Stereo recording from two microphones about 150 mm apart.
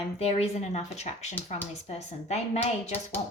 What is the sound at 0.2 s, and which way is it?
Speech, 45° left (ahead or behind).